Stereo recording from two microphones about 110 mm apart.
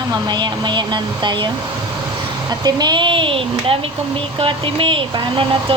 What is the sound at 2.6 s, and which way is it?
Speech, 40° right (ahead or behind).